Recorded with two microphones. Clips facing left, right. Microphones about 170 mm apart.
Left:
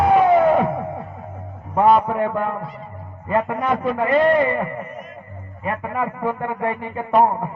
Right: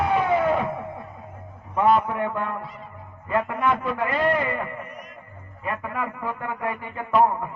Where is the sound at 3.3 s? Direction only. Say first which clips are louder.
Left 3 dB; 45° left (ahead or behind).